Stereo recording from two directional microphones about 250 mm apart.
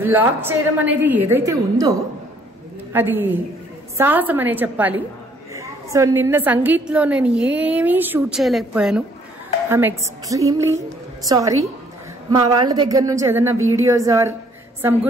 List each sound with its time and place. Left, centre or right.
0.0 s a woman's voice: centre